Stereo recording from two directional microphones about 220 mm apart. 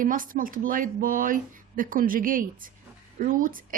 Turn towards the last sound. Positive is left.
turn(degrees=-40)  # may be behind; listen again after turning